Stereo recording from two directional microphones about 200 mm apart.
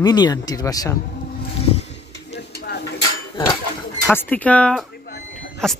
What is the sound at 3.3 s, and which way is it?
Dishes, 15° left (ahead or behind).